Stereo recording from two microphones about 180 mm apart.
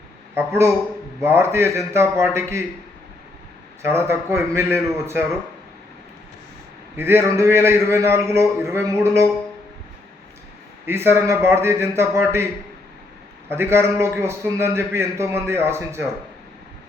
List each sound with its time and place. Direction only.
0.3 s a man's voice: 15° right (ahead or behind)
3.8 s a man's voice: 15° right (ahead or behind)
6.9 s a man's voice: 15° right (ahead or behind)
10.8 s a man's voice: 15° right (ahead or behind)
13.5 s a man's voice: 15° right (ahead or behind)